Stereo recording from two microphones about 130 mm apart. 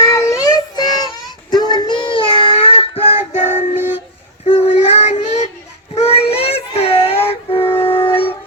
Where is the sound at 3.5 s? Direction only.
15° right (ahead or behind).